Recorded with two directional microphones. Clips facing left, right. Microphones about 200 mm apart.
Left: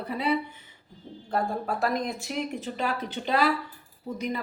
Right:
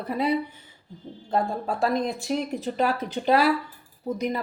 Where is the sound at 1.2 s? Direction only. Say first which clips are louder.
Right 2 dB; 25° right (ahead or behind).